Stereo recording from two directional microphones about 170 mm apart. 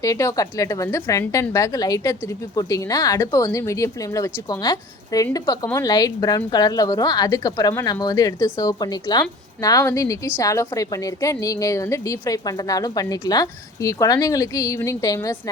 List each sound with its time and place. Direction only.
0.0 s a woman's voice: 20° left (ahead or behind)